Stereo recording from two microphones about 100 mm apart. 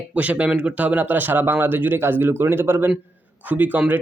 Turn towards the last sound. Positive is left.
turn(degrees=-20)  # may be behind; listen again after turning